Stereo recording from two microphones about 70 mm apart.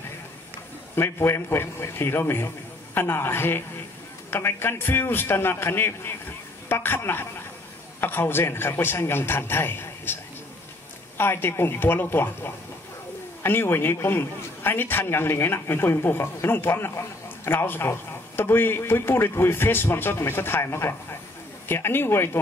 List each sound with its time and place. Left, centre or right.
0.9 s a man's voice: left
11.1 s a man's voice: left